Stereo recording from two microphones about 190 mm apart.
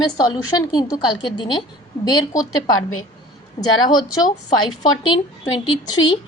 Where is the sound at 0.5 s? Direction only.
20° left (ahead or behind).